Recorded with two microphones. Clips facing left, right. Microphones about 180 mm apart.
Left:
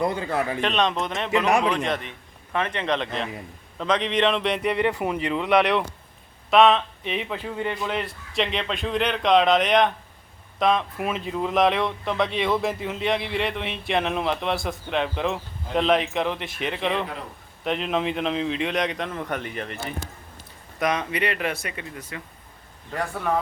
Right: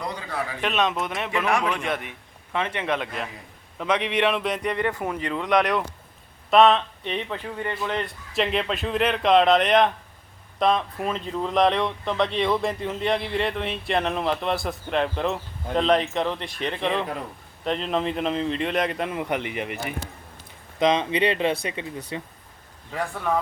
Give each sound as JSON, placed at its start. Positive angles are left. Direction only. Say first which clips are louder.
{"t": 0.0, "sound": "a man's voice", "louder": "left 7 dB", "side_deg": 50}
{"t": 0.6, "sound": "a man's voice", "louder": "left 1 dB", "side_deg": -5}
{"t": 4.6, "sound": "speech", "louder": "left 3 dB", "side_deg": 15}
{"t": 7.5, "sound": "speech", "louder": "left 1 dB", "side_deg": 15}
{"t": 8.3, "sound": "speech", "louder": "right 2 dB", "side_deg": 0}
{"t": 20.7, "sound": "speech", "louder": "right 4 dB", "side_deg": -25}
{"t": 22.9, "sound": "speech", "louder": "even", "side_deg": 0}